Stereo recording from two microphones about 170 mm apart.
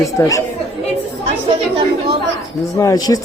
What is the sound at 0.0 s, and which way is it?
Speech, 15° left (ahead or behind).